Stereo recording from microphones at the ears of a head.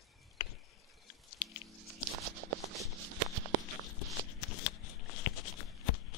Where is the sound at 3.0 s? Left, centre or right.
Right.